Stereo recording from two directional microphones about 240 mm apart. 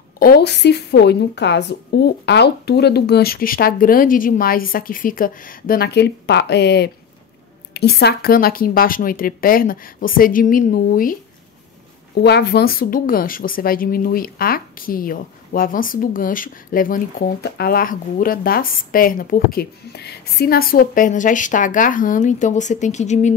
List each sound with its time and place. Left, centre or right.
0.2 s a woman's voice: left